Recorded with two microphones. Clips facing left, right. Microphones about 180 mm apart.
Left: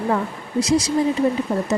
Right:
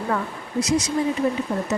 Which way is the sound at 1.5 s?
35° left (ahead or behind).